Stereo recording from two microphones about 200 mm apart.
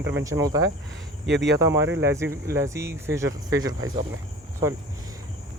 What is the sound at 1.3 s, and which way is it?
Speech, 60° right (ahead or behind).